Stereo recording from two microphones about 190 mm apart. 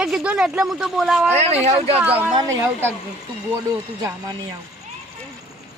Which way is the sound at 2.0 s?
10° right (ahead or behind).